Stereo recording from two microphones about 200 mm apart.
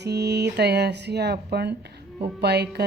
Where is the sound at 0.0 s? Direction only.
55° right (ahead or behind).